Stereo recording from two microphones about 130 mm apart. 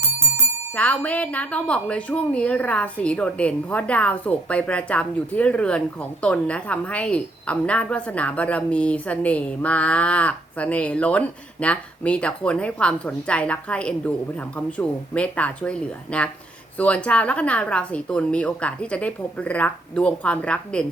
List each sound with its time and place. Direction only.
0.0 s music: 20° right (ahead or behind)
0.7 s speech: 10° left (ahead or behind)